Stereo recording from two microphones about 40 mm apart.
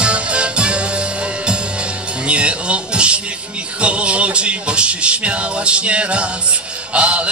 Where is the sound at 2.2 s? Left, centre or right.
Right.